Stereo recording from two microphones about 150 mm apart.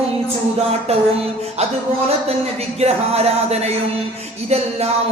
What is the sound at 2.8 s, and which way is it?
Music, 45° right (ahead or behind).